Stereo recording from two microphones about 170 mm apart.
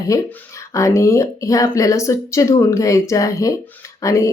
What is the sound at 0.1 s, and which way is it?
Speech, 20° left (ahead or behind).